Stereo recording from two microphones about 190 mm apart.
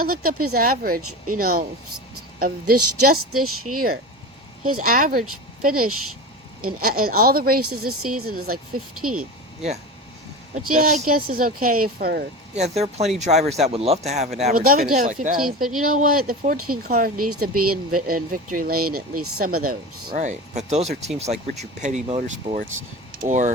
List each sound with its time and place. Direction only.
0.0 s speech: 50° right (ahead or behind)
3.7 s speech: 40° right (ahead or behind)
10.5 s speech: 45° right (ahead or behind)
12.5 s speech: 35° right (ahead or behind)
14.5 s speech: 50° right (ahead or behind); by 22.5 s 30° right (ahead or behind)
23.2 s speech: 40° right (ahead or behind)